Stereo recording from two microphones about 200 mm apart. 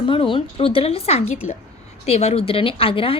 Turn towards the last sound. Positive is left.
turn(degrees=25)  # may be behind; listen again after turning